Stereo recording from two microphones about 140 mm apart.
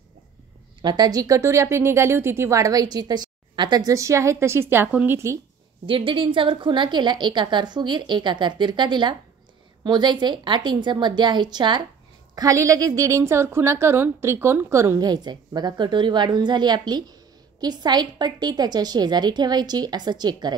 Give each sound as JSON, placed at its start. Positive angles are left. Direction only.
{"t": 0.8, "sound": "a woman's voice", "side_deg": -30}
{"t": 5.9, "sound": "a woman's voice", "side_deg": -40}